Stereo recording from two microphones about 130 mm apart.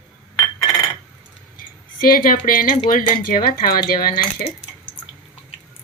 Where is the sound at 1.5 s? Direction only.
90° left.